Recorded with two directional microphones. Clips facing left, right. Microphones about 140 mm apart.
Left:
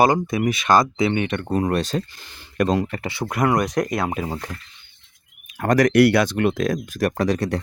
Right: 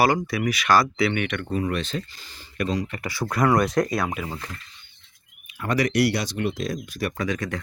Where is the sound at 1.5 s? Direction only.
40° left (ahead or behind).